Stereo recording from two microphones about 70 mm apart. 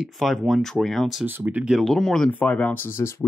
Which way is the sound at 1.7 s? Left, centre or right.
Centre.